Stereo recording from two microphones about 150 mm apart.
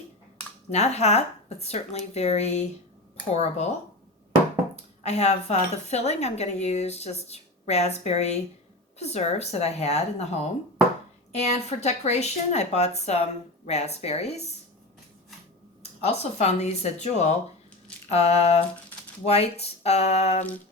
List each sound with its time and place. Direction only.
0.7 s speech: 45° left (ahead or behind)
5.0 s speech: 45° left (ahead or behind)
11.3 s speech: 45° left (ahead or behind)
16.0 s speech: 45° left (ahead or behind)